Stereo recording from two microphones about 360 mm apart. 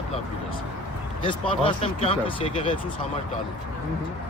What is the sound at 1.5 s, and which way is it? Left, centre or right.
Speech, centre.